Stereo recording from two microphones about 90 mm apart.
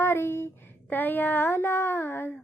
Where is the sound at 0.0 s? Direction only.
30° left (ahead or behind).